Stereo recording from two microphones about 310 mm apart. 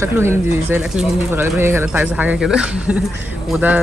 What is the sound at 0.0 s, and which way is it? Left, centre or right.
Speech, centre.